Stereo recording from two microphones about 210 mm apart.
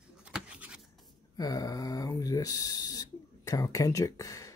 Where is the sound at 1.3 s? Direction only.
15° left (ahead or behind).